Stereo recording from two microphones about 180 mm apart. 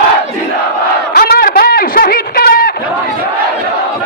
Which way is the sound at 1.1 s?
60° left (ahead or behind).